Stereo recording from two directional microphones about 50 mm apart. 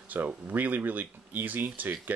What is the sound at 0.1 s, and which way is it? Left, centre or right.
Speech, right.